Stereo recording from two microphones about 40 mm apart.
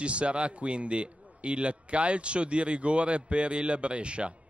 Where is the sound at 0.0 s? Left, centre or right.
Right.